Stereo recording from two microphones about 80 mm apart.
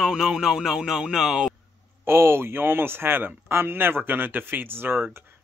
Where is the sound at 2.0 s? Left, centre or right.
Right.